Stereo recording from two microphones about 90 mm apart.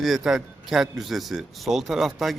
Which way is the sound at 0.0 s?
5° right (ahead or behind).